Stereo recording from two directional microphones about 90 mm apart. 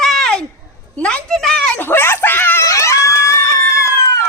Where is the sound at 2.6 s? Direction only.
35° left (ahead or behind).